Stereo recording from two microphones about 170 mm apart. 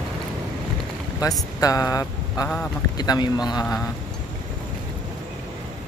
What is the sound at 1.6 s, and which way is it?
Mantra, 20° left (ahead or behind).